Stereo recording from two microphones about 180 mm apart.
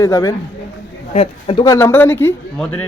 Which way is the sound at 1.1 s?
30° left (ahead or behind).